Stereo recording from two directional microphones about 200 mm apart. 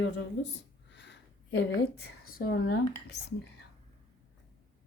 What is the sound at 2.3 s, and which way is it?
Speech, 45° left (ahead or behind).